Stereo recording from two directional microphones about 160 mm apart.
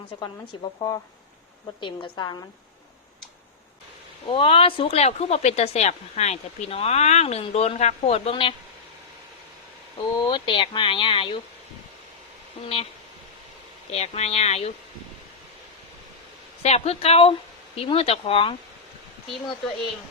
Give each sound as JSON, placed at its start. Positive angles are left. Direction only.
{"t": 0.8, "sound": "a woman's voice", "side_deg": 20}
{"t": 4.3, "sound": "speech", "side_deg": 35}
{"t": 10.0, "sound": "speech", "side_deg": 25}
{"t": 12.6, "sound": "speech", "side_deg": 35}
{"t": 13.9, "sound": "speech", "side_deg": 40}
{"t": 16.6, "sound": "speech", "side_deg": 40}